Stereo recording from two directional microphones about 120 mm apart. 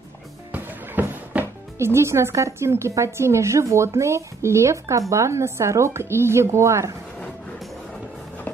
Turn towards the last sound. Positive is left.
turn(degrees=5)  # may be behind; listen again after turning